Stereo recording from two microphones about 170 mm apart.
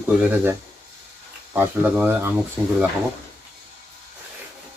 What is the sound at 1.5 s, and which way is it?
Speech, 10° right (ahead or behind).